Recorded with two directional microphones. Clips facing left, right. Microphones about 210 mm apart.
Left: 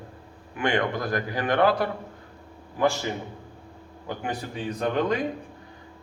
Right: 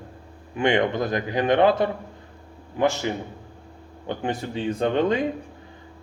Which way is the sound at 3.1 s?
20° right (ahead or behind).